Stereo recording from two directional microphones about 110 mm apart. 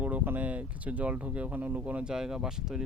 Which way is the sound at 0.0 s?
15° right (ahead or behind).